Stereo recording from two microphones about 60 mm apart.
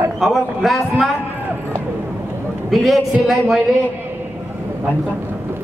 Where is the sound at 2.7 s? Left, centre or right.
Centre.